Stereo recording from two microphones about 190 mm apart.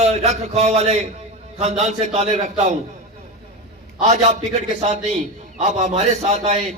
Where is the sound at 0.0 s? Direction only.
35° right (ahead or behind).